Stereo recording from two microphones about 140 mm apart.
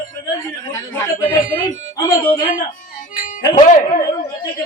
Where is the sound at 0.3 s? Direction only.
25° left (ahead or behind).